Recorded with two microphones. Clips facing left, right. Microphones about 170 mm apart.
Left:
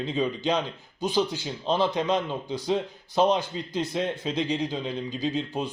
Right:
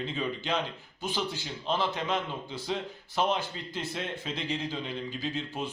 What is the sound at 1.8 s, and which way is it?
Speech, 15° left (ahead or behind).